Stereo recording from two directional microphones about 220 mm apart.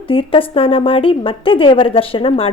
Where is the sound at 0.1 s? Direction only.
25° left (ahead or behind).